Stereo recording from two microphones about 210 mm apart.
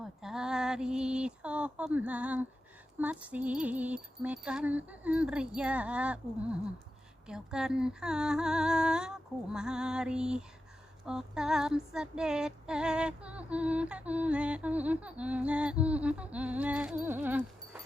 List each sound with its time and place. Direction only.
0.0 s a sound: centre (ahead or behind)
3.0 s music: 5° right (ahead or behind)
7.3 s female singing: 5° right (ahead or behind)